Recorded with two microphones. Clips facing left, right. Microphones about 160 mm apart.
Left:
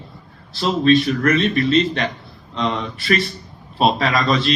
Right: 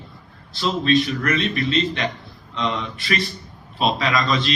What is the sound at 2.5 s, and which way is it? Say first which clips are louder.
Speech: left 3 dB; 35° left (ahead or behind).